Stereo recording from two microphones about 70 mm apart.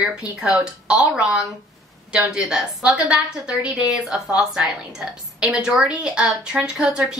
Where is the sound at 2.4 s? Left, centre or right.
Centre.